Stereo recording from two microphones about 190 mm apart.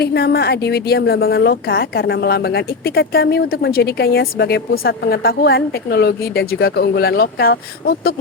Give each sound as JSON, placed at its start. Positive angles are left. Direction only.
{"t": 0.0, "sound": "a woman's voice", "side_deg": 55}